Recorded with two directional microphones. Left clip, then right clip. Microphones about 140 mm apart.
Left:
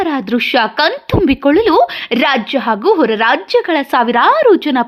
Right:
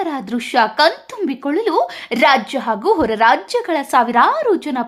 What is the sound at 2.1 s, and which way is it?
A woman's voice, 20° left (ahead or behind).